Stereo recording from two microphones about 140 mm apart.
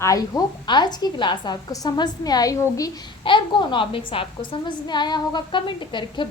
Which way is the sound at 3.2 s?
35° left (ahead or behind).